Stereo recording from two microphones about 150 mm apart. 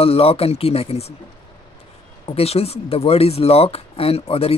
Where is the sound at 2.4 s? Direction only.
40° left (ahead or behind).